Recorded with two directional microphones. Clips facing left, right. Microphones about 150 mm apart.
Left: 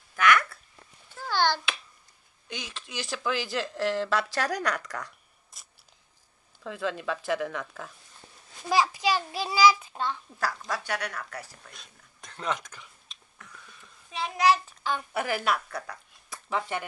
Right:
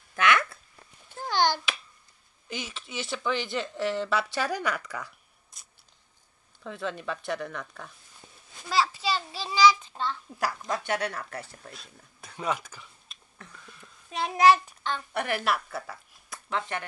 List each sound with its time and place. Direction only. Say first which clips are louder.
0.1 s a sound: left 1 dB; 25° right (ahead or behind)
1.3 s finger snapping: right 1 dB; 15° right (ahead or behind)
2.4 s speech: right 2 dB; 5° right (ahead or behind)
8.6 s a child's voice: left 2 dB; 15° left (ahead or behind)
10.7 s speech: right 3 dB; 25° right (ahead or behind)
11.7 s a sound: right 4 dB; 5° right (ahead or behind)
14.8 s a woman's voice: left 1 dB; 5° left (ahead or behind)